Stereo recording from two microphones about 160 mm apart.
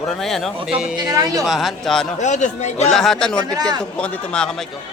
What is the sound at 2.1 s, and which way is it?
Speech, 50° left (ahead or behind).